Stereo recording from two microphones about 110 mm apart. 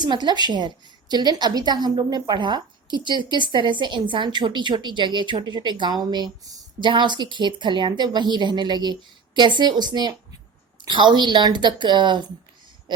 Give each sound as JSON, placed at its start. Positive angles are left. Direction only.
{"t": 0.0, "sound": "a woman's voice", "side_deg": -40}